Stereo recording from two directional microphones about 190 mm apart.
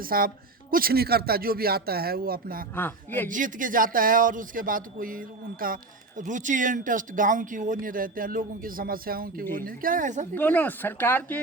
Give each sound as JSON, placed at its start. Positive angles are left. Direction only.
{"t": 0.0, "sound": "a man's voice", "side_deg": -50}
{"t": 2.7, "sound": "speech", "side_deg": 10}
{"t": 3.2, "sound": "a man's voice", "side_deg": -45}
{"t": 10.3, "sound": "speech", "side_deg": 10}